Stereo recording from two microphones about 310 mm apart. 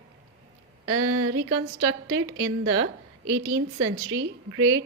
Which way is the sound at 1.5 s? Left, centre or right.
Centre.